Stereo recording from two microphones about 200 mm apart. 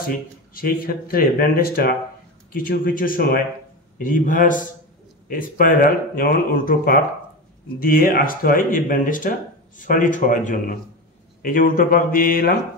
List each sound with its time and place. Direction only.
0.6 s a man's voice: 45° left (ahead or behind)